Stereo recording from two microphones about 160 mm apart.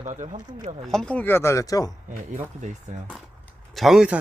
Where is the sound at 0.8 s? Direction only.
5° left (ahead or behind); by 1.9 s 20° left (ahead or behind).